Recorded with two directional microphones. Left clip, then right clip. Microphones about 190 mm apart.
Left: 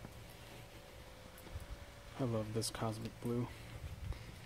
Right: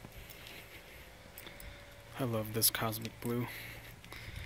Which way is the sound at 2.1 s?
10° right (ahead or behind).